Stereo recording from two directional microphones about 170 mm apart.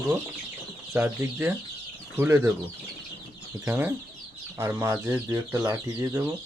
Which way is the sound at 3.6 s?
15° right (ahead or behind).